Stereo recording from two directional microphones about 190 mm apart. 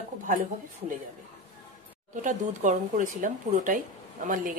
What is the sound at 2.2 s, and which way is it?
Speech, 40° right (ahead or behind).